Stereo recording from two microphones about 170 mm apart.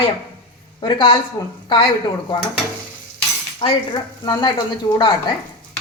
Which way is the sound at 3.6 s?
25° left (ahead or behind).